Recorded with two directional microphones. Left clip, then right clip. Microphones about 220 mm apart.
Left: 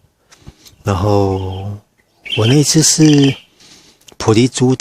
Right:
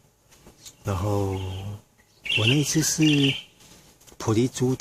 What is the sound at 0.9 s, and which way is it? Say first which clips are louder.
Speech: left 13 dB; 40° left (ahead or behind).